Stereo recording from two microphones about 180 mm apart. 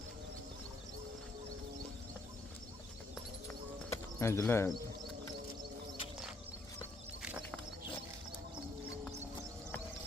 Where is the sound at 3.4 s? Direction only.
15° left (ahead or behind).